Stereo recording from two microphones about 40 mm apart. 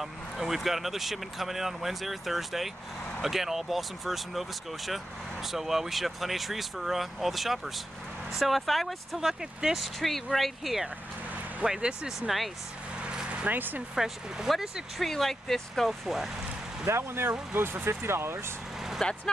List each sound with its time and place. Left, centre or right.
0.0 s speech: centre
9.2 s speech: centre
9.9 s speech: centre
11.6 s speech: centre
12.3 s speech: centre
13.0 s vehicle: centre
13.5 s speech: right
13.9 s speech: centre
14.5 s speech: centre
16.9 s speech: right
19.0 s speech: left